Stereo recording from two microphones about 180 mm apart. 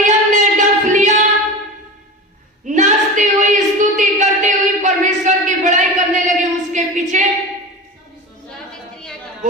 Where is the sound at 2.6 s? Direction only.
45° right (ahead or behind).